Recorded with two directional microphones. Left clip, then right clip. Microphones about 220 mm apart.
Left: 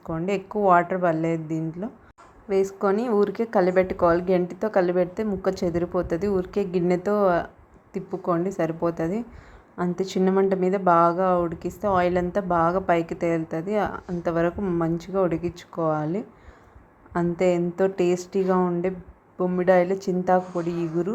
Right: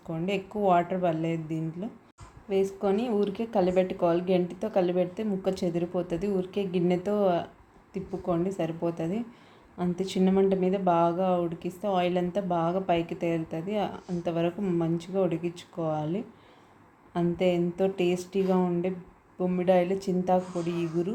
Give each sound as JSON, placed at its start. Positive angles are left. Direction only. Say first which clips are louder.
{"t": 0.1, "sound": "speech", "louder": "left 5 dB", "side_deg": 15}
{"t": 17.2, "sound": "speech", "louder": "left 4 dB", "side_deg": 15}